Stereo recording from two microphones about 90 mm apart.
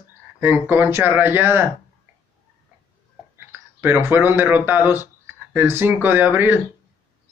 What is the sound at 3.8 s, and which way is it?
Speech, 20° right (ahead or behind).